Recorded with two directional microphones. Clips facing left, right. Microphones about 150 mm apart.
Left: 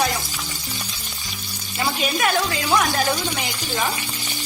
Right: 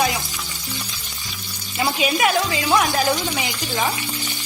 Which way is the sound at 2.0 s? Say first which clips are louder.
Right 2 dB; centre (ahead or behind).